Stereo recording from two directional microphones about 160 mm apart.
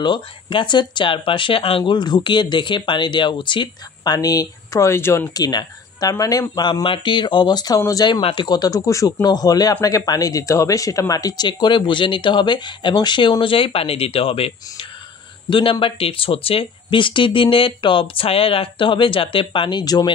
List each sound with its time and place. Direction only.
0.0 s speech: 30° left (ahead or behind)